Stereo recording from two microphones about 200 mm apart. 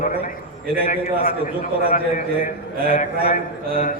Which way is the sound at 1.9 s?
45° left (ahead or behind).